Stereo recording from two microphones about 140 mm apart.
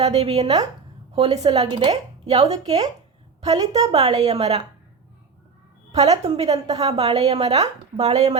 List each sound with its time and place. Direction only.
0.0 s a woman's voice: 45° right (ahead or behind)
1.6 s a woman's voice: 35° right (ahead or behind)
5.9 s a woman's voice: 50° right (ahead or behind)